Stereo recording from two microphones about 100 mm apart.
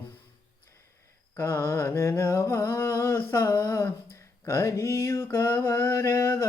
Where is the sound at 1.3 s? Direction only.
20° left (ahead or behind).